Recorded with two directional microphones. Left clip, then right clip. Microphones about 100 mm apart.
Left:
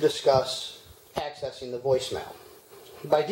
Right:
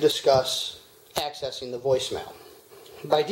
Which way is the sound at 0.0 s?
30° right (ahead or behind).